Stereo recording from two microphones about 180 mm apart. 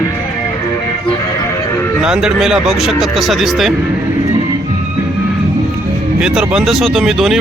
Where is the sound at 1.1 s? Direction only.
15° left (ahead or behind).